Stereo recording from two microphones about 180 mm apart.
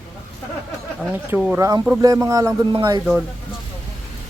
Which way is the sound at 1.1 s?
10° right (ahead or behind).